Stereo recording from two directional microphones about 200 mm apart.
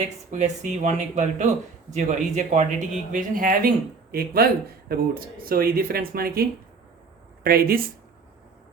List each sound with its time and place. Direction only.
0.0 s speech: 35° right (ahead or behind)